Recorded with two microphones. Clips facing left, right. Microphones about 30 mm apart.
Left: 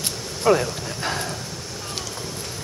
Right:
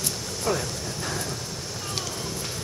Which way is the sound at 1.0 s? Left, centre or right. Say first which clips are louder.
Left 6 dB; left.